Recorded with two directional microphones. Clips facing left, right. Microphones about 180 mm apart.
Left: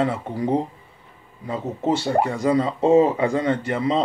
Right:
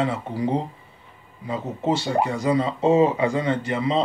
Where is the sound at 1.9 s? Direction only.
50° left (ahead or behind).